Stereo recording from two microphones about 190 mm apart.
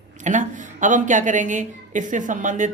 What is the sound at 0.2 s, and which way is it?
Speech, 40° right (ahead or behind).